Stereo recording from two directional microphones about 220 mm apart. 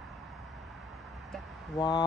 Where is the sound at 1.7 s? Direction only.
20° left (ahead or behind).